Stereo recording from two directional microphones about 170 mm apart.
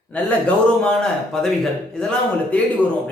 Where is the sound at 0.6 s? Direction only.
5° left (ahead or behind).